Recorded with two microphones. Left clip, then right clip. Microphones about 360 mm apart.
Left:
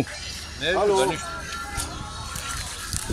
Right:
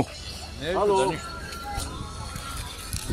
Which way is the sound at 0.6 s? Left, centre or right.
Left.